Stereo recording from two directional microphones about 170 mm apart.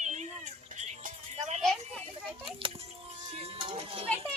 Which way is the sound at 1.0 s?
40° right (ahead or behind).